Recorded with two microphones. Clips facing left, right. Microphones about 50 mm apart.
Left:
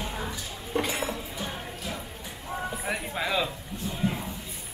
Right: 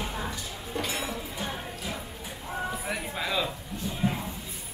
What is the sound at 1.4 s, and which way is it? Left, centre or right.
Music, centre.